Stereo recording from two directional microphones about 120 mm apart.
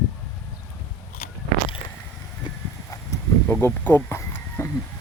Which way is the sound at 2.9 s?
25° left (ahead or behind).